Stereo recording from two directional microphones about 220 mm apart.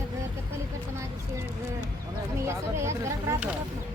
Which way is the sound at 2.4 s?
10° right (ahead or behind).